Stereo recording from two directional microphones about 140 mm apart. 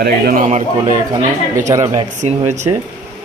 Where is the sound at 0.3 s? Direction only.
65° right (ahead or behind).